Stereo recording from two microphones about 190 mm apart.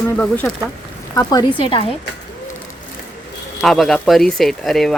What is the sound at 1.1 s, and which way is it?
Speech, 20° left (ahead or behind).